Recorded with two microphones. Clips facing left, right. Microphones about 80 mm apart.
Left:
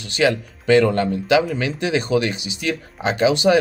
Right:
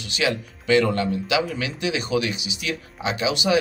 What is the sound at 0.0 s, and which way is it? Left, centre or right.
Speech, left.